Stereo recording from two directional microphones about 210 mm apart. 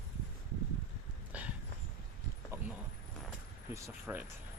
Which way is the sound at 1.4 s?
10° right (ahead or behind).